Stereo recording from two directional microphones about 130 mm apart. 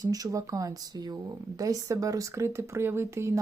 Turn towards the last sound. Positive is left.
turn(degrees=-20)  # may be behind; listen again after turning